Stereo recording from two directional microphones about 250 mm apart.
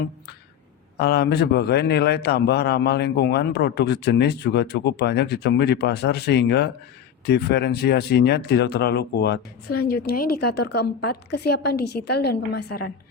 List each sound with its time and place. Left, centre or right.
0.9 s a man's voice: left